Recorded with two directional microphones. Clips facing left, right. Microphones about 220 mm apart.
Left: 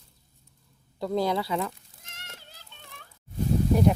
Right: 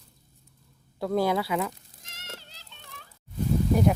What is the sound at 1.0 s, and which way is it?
Speech, 5° right (ahead or behind).